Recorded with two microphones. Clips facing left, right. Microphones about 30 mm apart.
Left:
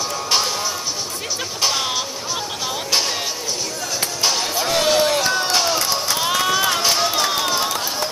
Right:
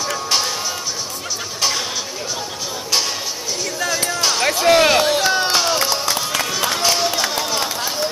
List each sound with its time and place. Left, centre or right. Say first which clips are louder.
4.7 s run: right 1 dB; right
5.0 s crowd: right 2 dB; centre
6.6 s run: even; centre